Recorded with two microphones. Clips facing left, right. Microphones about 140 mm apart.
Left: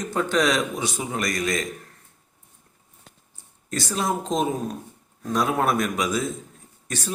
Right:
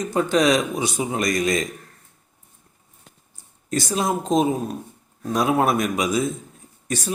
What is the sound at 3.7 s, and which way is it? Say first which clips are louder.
A man's voice: right 3 dB; 15° right (ahead or behind).